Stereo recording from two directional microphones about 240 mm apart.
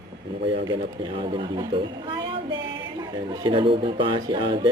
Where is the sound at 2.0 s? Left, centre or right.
Right.